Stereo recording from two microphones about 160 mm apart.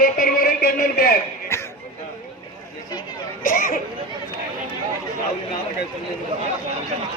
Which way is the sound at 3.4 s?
55° left (ahead or behind).